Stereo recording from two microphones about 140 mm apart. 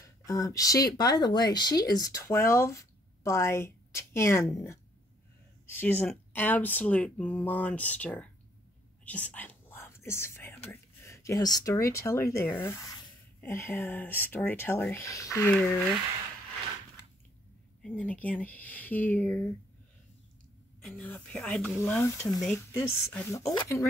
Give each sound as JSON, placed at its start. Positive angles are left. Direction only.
{"t": 0.0, "sound": "speech", "side_deg": 25}
{"t": 9.0, "sound": "whispering", "side_deg": 10}
{"t": 10.7, "sound": "speech", "side_deg": 20}
{"t": 17.8, "sound": "speech", "side_deg": 10}
{"t": 20.8, "sound": "speech", "side_deg": 0}